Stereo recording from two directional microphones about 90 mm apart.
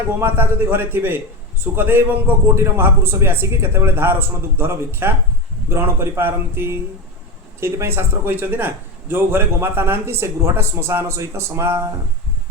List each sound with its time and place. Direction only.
0.2 s a man's voice: 25° right (ahead or behind)